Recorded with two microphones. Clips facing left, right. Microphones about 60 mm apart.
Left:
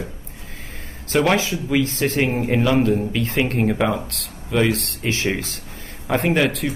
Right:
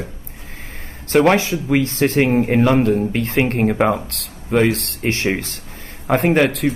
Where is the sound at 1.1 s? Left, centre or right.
Right.